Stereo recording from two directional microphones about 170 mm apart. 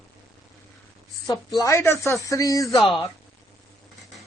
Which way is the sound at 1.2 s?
20° left (ahead or behind).